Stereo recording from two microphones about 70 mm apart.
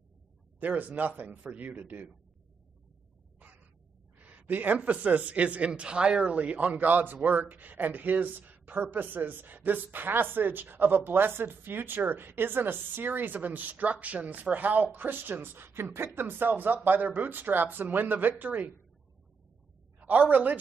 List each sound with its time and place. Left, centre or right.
0.6 s speech: right
4.2 s speech: right
20.0 s a woman's voice: right